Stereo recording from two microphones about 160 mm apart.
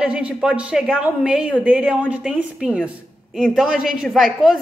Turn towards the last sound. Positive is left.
turn(degrees=0)  # may be behind; listen again after turning